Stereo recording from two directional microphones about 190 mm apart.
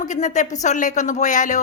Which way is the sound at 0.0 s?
40° left (ahead or behind).